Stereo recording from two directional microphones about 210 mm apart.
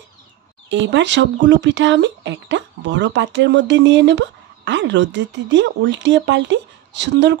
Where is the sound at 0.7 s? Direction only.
60° right (ahead or behind).